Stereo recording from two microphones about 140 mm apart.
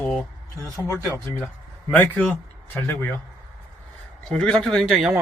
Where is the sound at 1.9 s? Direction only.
10° left (ahead or behind).